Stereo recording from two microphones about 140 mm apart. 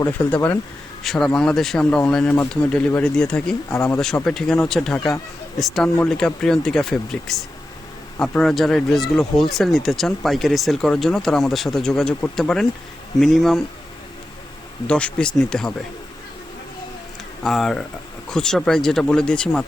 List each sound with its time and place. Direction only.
0.1 s speech: 10° left (ahead or behind)
3.7 s speech: 20° left (ahead or behind)
4.0 s speech: 5° left (ahead or behind)
14.8 s speech: 10° left (ahead or behind)
17.4 s speech: centre (ahead or behind)